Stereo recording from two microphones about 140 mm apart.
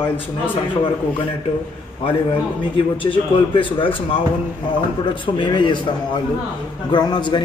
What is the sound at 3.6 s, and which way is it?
Speech, 40° left (ahead or behind).